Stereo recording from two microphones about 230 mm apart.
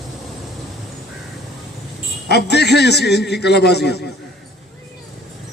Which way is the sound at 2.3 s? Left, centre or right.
Left.